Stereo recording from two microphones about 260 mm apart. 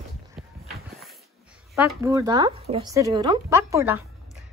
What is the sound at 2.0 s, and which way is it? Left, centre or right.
Speech, centre.